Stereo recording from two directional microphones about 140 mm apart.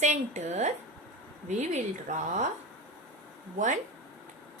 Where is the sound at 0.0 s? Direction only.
55° right (ahead or behind).